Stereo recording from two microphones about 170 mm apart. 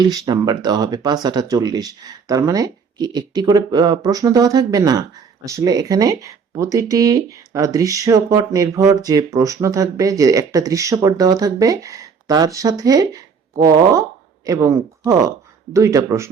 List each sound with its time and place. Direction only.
0.0 s speech: 25° right (ahead or behind)